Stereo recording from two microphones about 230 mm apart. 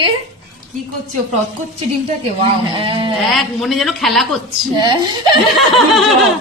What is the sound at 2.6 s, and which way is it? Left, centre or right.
Speech, right.